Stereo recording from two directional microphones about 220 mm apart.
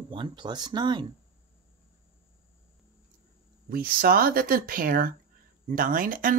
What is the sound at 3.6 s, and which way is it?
Speech, 40° right (ahead or behind).